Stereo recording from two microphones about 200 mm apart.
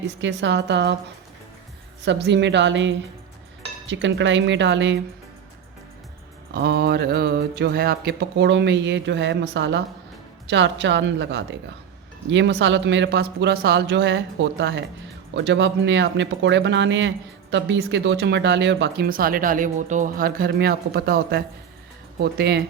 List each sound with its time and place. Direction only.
0.2 s speech: 65° right (ahead or behind)
2.0 s speech: 60° right (ahead or behind)
6.5 s speech: 55° right (ahead or behind)